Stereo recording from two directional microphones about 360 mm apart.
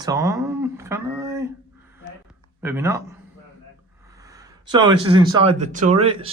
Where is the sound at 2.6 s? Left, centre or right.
Centre.